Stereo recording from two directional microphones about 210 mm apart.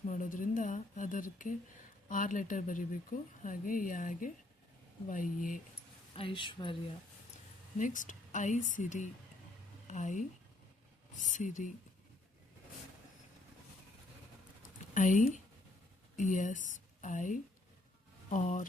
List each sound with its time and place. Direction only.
0.1 s speech: 40° left (ahead or behind)
6.1 s speech: 25° left (ahead or behind)
7.8 s speech: 40° left (ahead or behind)
11.3 s speech: 35° left (ahead or behind)
14.9 s speech: 35° left (ahead or behind)